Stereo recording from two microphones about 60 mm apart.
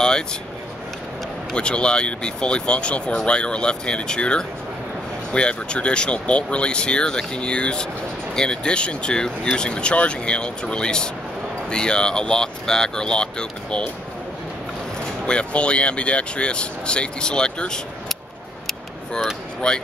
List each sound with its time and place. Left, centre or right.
0.0 s a sound: centre
1.5 s speech: centre
15.2 s speech: centre
19.6 s speech: centre